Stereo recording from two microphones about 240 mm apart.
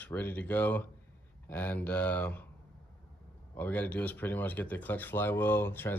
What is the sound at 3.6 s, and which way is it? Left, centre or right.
Speech, centre.